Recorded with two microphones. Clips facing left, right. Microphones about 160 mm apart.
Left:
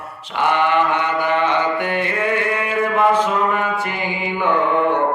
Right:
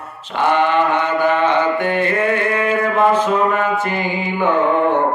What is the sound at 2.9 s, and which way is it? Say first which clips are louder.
Speech: even; 15° left (ahead or behind).